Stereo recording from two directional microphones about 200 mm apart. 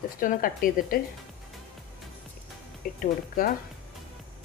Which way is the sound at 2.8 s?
45° left (ahead or behind).